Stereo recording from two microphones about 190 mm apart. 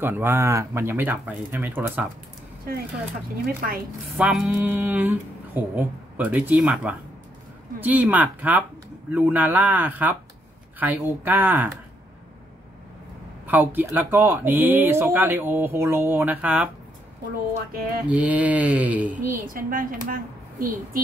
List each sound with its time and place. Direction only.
0.0 s speech: 10° right (ahead or behind)
4.2 s speech: 5° right (ahead or behind)
13.5 s speech: 10° right (ahead or behind)
18.0 s speech: 5° right (ahead or behind)
19.3 s a woman's voice: 45° right (ahead or behind)